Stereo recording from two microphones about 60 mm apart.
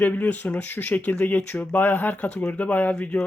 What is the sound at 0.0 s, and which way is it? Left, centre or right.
A man's voice, left.